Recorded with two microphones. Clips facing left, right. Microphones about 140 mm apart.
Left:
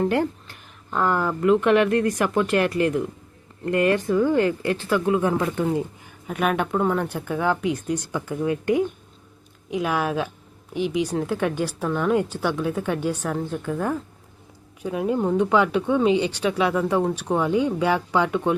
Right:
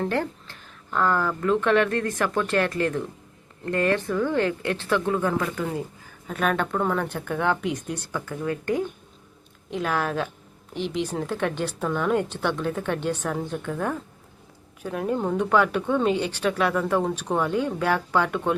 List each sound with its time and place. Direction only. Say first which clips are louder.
0.0 s speech: left 4 dB; 15° left (ahead or behind)
5.2 s speech: left 3 dB; 20° left (ahead or behind)
6.2 s a woman's voice: left 2 dB; 10° left (ahead or behind)